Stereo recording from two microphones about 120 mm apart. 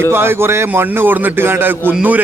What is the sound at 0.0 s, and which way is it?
A man's voice, 20° right (ahead or behind).